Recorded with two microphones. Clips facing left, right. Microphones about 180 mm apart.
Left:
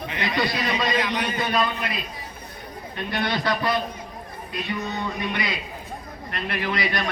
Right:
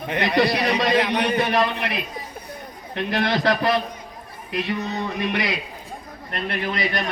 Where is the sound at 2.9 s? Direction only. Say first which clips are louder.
Right 4 dB; 80° right.